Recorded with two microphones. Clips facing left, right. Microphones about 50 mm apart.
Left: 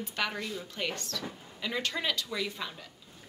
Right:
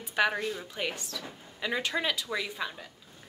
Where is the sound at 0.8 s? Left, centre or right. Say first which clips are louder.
Even; centre.